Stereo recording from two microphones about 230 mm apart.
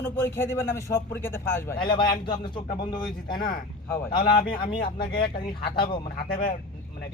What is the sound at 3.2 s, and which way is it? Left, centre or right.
Speech, left.